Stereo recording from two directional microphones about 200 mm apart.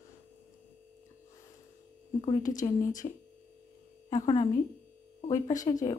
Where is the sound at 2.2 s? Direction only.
35° left (ahead or behind).